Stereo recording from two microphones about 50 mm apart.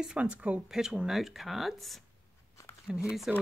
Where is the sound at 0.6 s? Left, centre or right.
Centre.